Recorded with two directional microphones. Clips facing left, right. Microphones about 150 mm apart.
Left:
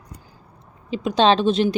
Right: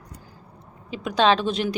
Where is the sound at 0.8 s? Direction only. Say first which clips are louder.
Left 3 dB; 25° left (ahead or behind).